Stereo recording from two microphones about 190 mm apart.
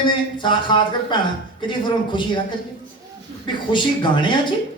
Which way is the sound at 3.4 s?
25° left (ahead or behind).